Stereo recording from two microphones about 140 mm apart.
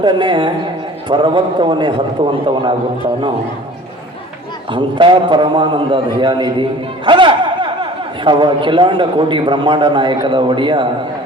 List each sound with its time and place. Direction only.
0.0 s a man's voice: 35° right (ahead or behind)
4.7 s a man's voice: 35° right (ahead or behind)